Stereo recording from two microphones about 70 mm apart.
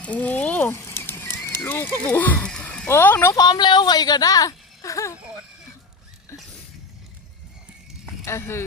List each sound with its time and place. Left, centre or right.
0.0 s speech: left
0.7 s a sound: left
2.0 s speech: left
2.4 s a sound: centre
2.9 s speech: left
3.3 s speech: left
8.2 s speech: left